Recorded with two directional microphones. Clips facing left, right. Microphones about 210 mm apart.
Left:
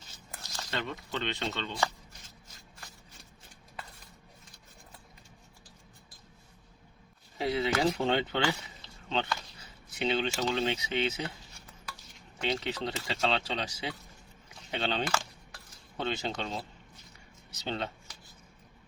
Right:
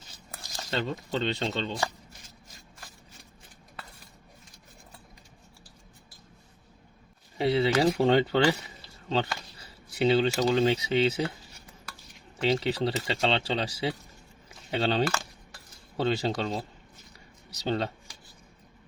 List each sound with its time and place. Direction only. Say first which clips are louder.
0.7 s speech: right 6 dB; 30° right (ahead or behind)
7.3 s speech: right 5 dB; 30° right (ahead or behind)
12.5 s speech: right 7 dB; 30° right (ahead or behind)